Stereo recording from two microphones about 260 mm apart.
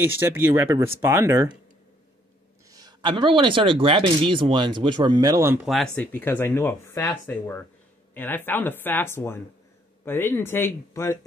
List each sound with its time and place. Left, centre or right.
0.0 s speech: centre
2.7 s speech: centre
5.7 s speech: centre